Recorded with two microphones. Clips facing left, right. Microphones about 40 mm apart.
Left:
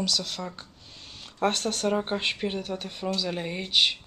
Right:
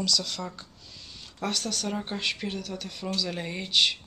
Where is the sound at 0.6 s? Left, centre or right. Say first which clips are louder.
Left 1 dB; left.